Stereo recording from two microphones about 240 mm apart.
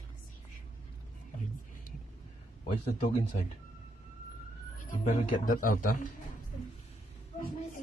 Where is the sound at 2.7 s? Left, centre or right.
Left.